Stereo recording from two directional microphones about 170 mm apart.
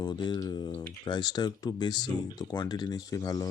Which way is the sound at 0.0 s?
25° left (ahead or behind).